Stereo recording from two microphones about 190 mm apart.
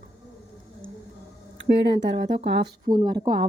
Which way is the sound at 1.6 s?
65° right (ahead or behind).